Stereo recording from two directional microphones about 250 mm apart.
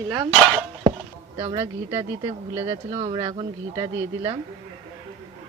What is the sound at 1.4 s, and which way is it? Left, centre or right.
Speech, right.